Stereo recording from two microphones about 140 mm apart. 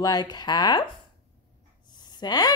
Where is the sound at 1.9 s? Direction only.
30° left (ahead or behind).